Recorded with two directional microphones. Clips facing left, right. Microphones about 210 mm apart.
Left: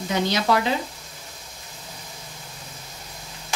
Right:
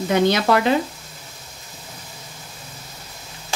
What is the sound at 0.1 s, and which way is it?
Speech, 60° right (ahead or behind).